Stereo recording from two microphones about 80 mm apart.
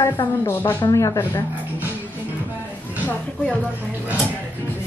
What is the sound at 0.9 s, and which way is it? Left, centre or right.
Speech, left.